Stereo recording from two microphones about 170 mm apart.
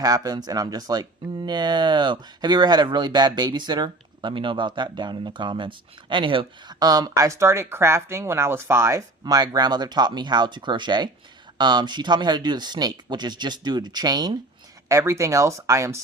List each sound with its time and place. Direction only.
0.0 s speech: 20° right (ahead or behind)